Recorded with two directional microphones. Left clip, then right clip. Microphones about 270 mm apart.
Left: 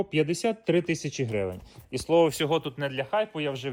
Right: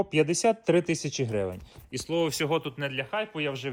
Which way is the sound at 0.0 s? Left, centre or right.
Centre.